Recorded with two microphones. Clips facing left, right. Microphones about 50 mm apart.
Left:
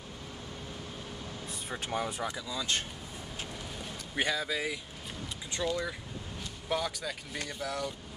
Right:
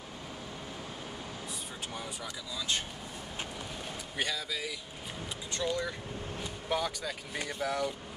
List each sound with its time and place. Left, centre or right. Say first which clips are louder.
1.7 s speech: left 11 dB; left
4.2 s speech: left 4 dB; left
5.6 s speech: left 1 dB; centre
6.7 s speech: even; centre
7.3 s speech: right 4 dB; centre